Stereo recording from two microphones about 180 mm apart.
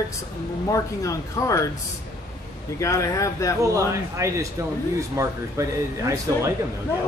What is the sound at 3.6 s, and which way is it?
Speech, 15° right (ahead or behind).